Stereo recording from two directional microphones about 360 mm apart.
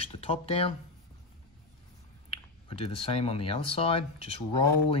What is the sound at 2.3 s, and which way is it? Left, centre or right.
Speech, centre.